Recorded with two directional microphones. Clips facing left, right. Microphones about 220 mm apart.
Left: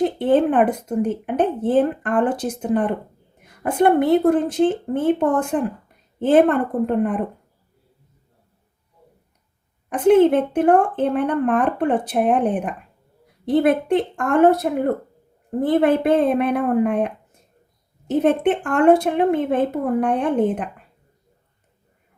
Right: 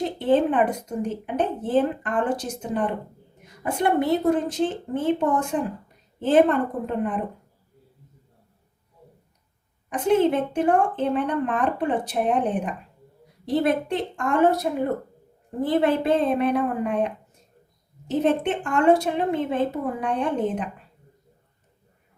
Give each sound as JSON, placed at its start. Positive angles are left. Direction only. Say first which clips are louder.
{"t": 0.0, "sound": "a woman's voice", "louder": "left 4 dB", "side_deg": 55}
{"t": 9.9, "sound": "a woman's voice", "louder": "left 6 dB", "side_deg": 55}
{"t": 18.2, "sound": "a woman's voice", "louder": "left 4 dB", "side_deg": 55}